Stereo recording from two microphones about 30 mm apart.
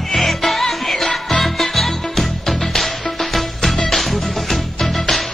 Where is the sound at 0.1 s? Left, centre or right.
Centre.